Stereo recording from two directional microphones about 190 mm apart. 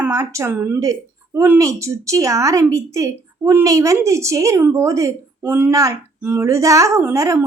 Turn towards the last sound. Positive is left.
turn(degrees=-15)  # may be behind; listen again after turning